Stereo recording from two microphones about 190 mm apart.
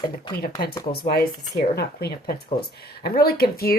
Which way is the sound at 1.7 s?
60° left (ahead or behind).